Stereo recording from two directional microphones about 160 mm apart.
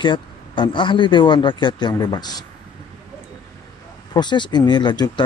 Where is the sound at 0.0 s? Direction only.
30° left (ahead or behind).